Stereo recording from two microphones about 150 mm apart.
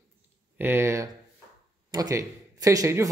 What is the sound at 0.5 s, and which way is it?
A man's voice, 15° right (ahead or behind).